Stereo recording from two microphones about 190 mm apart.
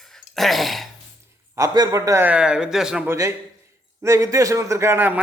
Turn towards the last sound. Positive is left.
turn(degrees=-10)  # may be behind; listen again after turning